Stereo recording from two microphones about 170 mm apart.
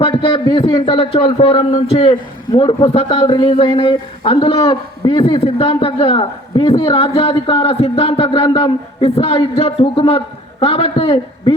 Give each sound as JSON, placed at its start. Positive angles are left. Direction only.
{"t": 0.0, "sound": "a man's voice", "side_deg": 30}